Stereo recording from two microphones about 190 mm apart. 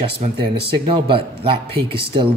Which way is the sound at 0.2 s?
40° right (ahead or behind).